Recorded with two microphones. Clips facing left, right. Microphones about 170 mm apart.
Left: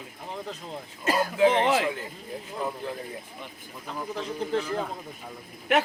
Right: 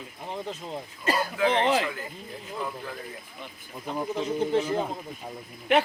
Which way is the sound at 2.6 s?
25° left (ahead or behind).